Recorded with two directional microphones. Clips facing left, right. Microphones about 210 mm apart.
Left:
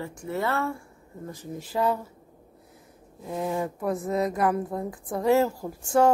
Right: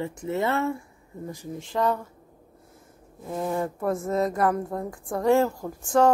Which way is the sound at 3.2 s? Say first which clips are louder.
Right 1 dB; 5° left (ahead or behind).